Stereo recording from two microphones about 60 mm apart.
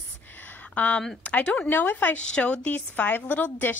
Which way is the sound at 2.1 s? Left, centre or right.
Centre.